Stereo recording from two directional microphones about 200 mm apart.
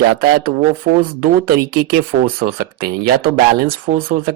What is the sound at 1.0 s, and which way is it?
Speech, 50° right (ahead or behind).